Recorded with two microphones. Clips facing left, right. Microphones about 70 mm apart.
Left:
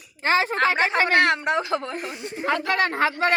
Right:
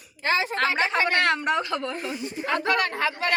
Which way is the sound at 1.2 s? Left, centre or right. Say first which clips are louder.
Left 2 dB; centre.